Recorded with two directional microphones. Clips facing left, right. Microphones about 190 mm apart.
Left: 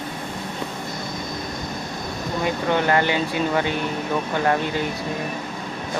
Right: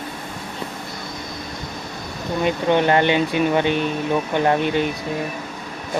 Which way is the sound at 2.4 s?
20° right (ahead or behind).